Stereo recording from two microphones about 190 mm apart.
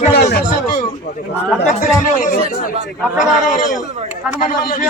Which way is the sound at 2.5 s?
45° left (ahead or behind).